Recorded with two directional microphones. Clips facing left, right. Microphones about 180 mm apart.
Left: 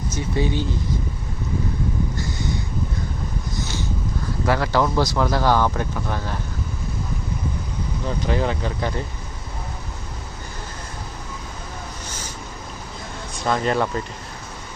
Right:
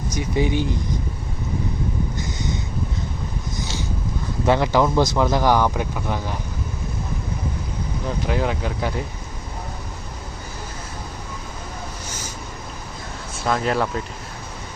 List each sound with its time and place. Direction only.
0.1 s speech: 15° right (ahead or behind)
2.1 s a sound: 20° right (ahead or behind)
4.4 s speech: 20° right (ahead or behind)
8.3 s speech: 5° right (ahead or behind)
12.0 s vehicle: 10° right (ahead or behind)
13.3 s speech: 5° right (ahead or behind)